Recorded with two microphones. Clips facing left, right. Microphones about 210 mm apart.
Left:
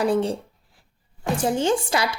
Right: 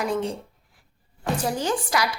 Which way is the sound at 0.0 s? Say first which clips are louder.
Left 5 dB; 35° left (ahead or behind).